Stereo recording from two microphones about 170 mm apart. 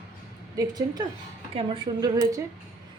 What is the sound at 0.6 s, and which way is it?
Speech, 20° right (ahead or behind).